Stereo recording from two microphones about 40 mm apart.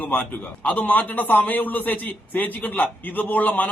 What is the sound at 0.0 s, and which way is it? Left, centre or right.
A man's voice, left.